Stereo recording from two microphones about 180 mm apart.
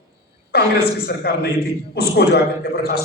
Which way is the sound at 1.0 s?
60° left (ahead or behind).